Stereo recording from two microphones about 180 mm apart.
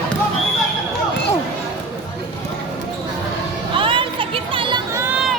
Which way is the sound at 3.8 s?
30° right (ahead or behind).